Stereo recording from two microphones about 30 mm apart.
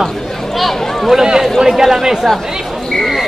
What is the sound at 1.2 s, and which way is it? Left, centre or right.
Speech, centre.